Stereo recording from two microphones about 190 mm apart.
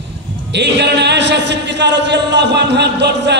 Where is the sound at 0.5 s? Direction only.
65° right (ahead or behind).